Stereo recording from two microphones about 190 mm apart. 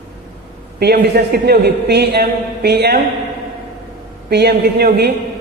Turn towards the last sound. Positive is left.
turn(degrees=-55)  # may be behind; listen again after turning